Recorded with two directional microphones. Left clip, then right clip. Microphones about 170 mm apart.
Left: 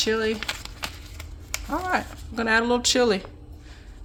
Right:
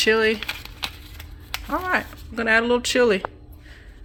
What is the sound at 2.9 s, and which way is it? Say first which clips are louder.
Speech: right 3 dB; 10° right (ahead or behind).